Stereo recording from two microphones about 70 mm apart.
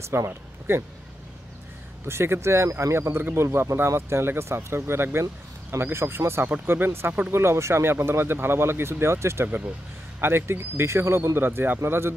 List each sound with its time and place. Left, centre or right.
0.3 s speech: right
2.0 s speech: right